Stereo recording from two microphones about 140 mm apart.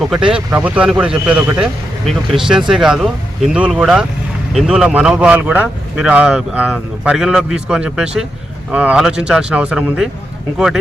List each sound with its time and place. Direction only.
0.0 s speech: 5° right (ahead or behind)